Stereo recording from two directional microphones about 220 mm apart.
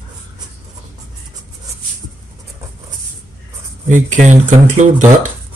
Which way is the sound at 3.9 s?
35° right (ahead or behind).